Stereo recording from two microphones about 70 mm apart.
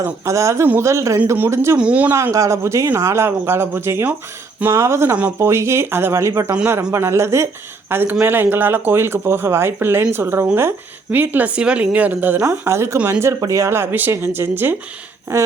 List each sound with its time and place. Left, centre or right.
0.3 s speech: right
1.8 s speech: centre
2.1 s a man's voice: right
12.5 s a man's voice: right
13.4 s a man's voice: right
15.3 s speech: right